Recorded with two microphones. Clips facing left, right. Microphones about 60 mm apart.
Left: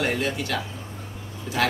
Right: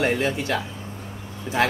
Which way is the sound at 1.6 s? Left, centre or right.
Right.